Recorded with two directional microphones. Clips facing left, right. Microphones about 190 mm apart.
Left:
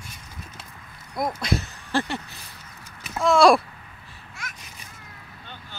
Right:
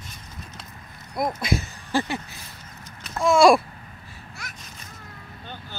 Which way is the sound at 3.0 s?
Centre (ahead or behind).